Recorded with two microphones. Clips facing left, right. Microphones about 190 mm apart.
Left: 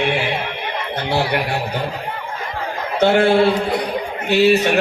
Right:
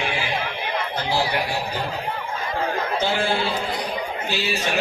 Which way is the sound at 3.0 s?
65° left (ahead or behind).